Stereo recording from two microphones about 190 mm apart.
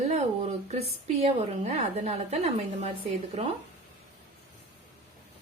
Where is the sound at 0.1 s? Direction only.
35° right (ahead or behind).